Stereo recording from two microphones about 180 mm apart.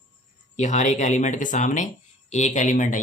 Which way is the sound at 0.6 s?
40° left (ahead or behind).